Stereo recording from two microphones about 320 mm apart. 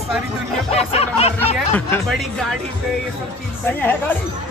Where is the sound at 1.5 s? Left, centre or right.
Centre.